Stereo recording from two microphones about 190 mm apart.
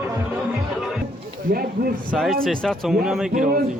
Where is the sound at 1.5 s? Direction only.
50° right (ahead or behind).